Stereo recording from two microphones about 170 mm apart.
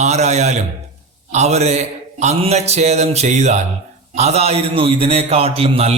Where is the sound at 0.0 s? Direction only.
40° right (ahead or behind).